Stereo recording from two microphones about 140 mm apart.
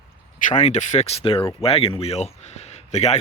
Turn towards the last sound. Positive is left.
turn(degrees=55)  # may be behind; listen again after turning